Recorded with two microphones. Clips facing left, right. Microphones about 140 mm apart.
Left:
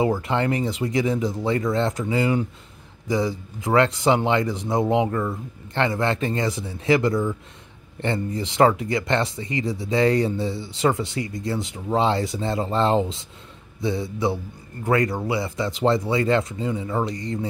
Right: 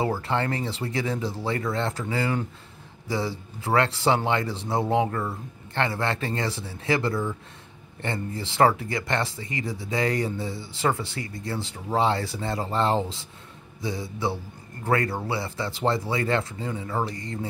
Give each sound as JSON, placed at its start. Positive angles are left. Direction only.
{"t": 0.2, "sound": "speech", "side_deg": 20}